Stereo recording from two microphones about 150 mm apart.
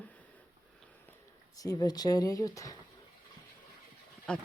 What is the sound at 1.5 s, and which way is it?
Speech, 25° left (ahead or behind).